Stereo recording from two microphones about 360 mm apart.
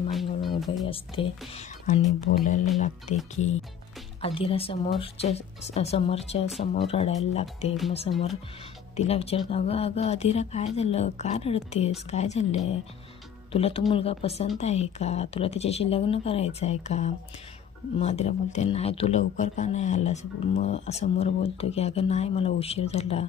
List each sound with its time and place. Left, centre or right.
0.1 s music: centre
0.8 s speech: centre
4.2 s speech: centre